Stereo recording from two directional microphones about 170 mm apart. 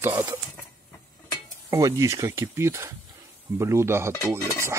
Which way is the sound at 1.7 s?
20° right (ahead or behind).